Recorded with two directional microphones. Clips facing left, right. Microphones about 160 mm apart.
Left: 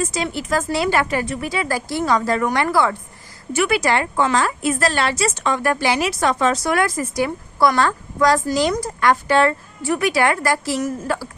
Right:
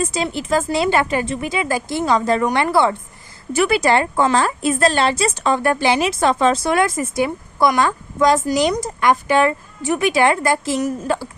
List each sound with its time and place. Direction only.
0.0 s a woman's voice: 25° right (ahead or behind)